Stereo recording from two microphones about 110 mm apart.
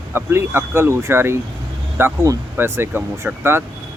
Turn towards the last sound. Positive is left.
turn(degrees=-20)  # may be behind; listen again after turning